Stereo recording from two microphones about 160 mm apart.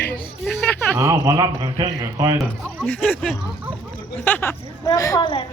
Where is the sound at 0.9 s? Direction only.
20° right (ahead or behind).